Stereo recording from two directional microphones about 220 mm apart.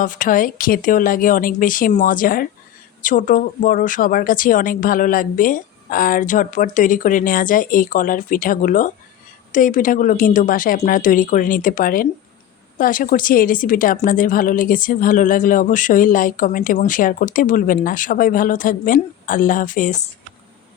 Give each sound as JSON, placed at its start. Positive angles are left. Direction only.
{"t": 0.0, "sound": "speech", "side_deg": 35}